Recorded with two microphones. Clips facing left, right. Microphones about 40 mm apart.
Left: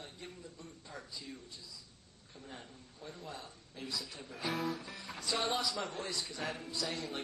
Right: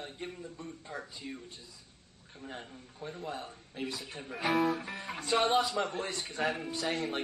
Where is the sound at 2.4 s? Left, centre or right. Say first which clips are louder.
Right 7 dB; right.